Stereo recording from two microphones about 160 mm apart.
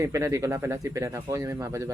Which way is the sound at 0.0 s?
20° right (ahead or behind).